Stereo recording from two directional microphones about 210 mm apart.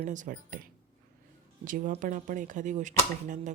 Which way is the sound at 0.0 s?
35° right (ahead or behind).